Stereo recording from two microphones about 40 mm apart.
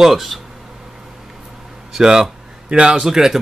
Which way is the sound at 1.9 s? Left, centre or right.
Centre.